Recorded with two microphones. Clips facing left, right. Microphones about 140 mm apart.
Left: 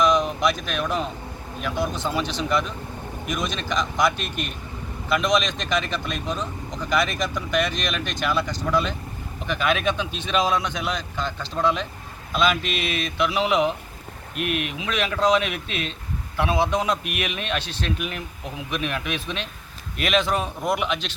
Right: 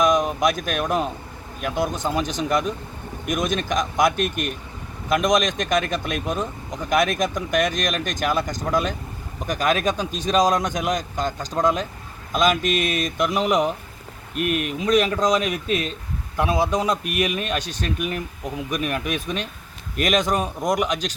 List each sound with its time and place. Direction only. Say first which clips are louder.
0.0 s speech: right 1 dB; 45° right (ahead or behind)